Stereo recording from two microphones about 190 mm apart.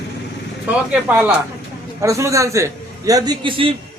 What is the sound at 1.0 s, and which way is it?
A man's voice, 10° right (ahead or behind).